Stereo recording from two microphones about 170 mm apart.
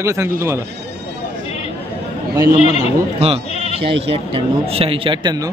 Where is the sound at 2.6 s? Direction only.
35° left (ahead or behind).